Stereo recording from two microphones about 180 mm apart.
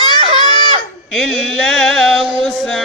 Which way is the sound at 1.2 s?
Centre (ahead or behind).